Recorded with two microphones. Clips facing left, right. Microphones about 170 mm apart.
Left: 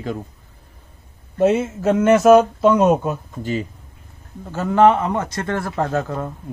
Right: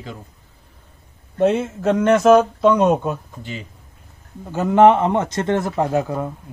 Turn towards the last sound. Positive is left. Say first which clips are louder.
# right 2 dB
turn(degrees=-10)  # may be behind; listen again after turning